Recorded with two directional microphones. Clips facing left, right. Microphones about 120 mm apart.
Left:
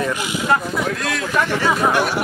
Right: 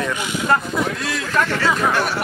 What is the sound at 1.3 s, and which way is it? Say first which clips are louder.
Speech: even; 15° left (ahead or behind).